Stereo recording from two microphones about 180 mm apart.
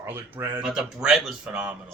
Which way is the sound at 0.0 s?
15° right (ahead or behind).